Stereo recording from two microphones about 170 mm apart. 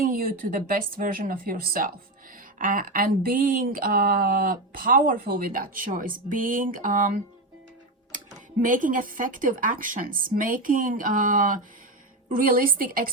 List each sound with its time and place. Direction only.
0.0 s a woman's voice: 55° right (ahead or behind)
8.5 s a woman's voice: 50° right (ahead or behind)